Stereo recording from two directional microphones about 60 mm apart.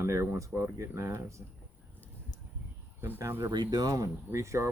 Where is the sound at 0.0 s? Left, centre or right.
Right.